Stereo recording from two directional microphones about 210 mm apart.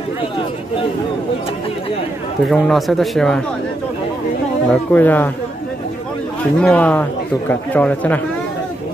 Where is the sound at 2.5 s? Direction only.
Centre (ahead or behind).